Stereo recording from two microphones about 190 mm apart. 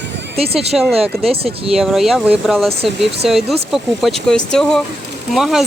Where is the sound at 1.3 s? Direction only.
30° right (ahead or behind).